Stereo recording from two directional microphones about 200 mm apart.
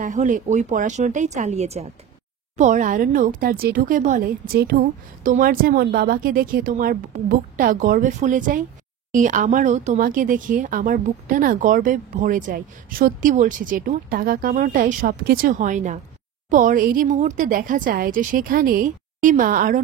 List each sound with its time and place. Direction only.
0.0 s speech: 40° right (ahead or behind)